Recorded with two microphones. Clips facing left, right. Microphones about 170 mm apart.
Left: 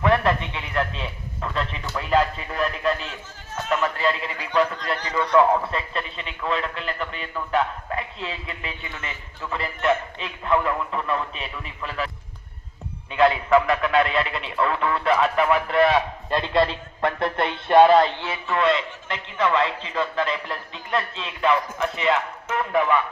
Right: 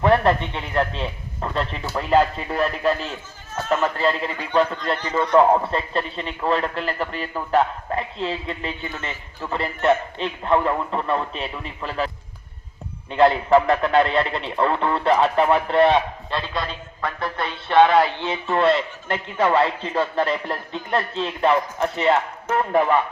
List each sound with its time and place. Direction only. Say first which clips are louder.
0.0 s a man's voice: right 3 dB; 35° right (ahead or behind)
16.3 s speech: left 7 dB; 25° left (ahead or behind)
18.2 s a man's voice: right 5 dB; 20° right (ahead or behind)
18.5 s a man's voice: right 2 dB; 35° right (ahead or behind)